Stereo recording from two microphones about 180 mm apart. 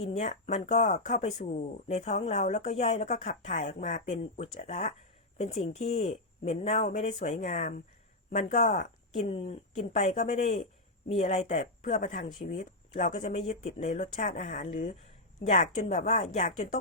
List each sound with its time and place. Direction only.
0.0 s speech: 40° left (ahead or behind)
7.3 s speech: 30° left (ahead or behind); by 12.6 s 50° left (ahead or behind)
13.1 s speech: 35° left (ahead or behind)